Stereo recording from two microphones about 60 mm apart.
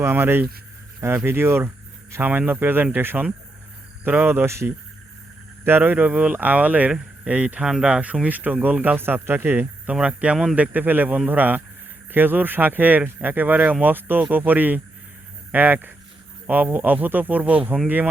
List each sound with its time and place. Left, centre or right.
0.0 s speech: right
2.5 s speech: right
4.4 s speech: right
5.6 s speech: right; by 8.0 s centre
8.0 s speech: right
9.8 s speech: centre